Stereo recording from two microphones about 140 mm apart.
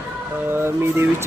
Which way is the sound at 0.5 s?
15° right (ahead or behind).